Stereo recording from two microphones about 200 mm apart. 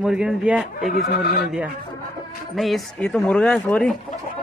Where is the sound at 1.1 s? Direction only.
45° left (ahead or behind).